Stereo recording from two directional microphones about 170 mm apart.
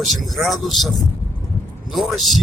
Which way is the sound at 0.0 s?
Centre (ahead or behind).